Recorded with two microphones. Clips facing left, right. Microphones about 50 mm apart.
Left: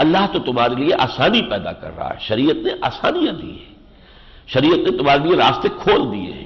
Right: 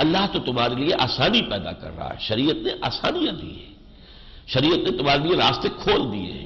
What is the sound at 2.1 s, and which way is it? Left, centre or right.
A man's voice, left.